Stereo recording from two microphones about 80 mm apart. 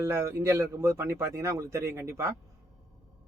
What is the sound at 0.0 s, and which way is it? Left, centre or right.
Speech, right.